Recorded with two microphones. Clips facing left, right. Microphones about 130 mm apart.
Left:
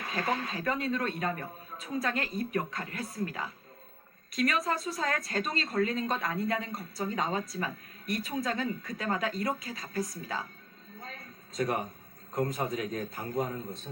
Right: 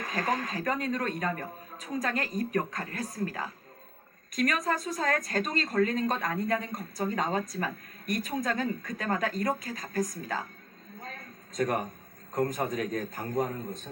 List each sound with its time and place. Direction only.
0.0 s speech: 40° right (ahead or behind)
11.0 s a sound: 45° right (ahead or behind)
12.3 s speech: 45° right (ahead or behind)